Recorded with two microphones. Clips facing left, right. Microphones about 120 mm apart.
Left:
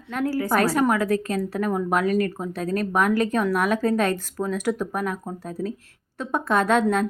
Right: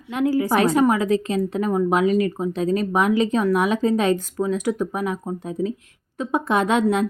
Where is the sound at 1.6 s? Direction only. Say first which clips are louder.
Right 4 dB; 5° right (ahead or behind).